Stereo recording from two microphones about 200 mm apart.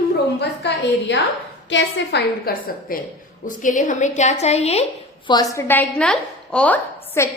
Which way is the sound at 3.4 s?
40° left (ahead or behind).